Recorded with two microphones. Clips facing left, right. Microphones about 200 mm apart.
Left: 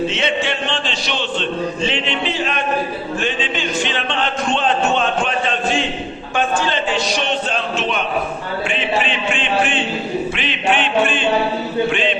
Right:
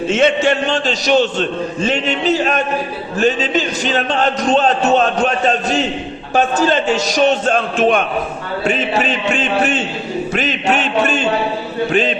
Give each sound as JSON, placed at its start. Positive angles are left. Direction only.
{"t": 0.1, "sound": "a man's voice", "side_deg": -45}